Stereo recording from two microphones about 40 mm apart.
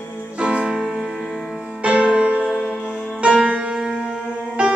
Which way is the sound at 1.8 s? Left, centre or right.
Right.